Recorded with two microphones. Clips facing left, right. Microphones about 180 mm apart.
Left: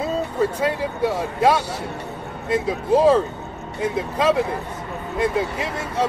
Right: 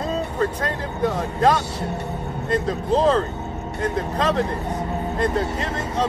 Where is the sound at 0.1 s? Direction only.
10° left (ahead or behind).